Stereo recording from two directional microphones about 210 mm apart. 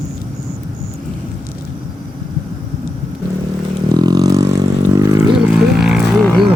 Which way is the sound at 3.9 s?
20° right (ahead or behind).